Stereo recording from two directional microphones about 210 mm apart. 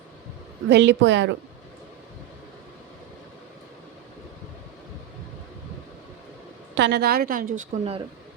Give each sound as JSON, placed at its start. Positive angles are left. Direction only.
{"t": 0.7, "sound": "a woman's voice", "side_deg": -55}
{"t": 6.7, "sound": "a woman's voice", "side_deg": -55}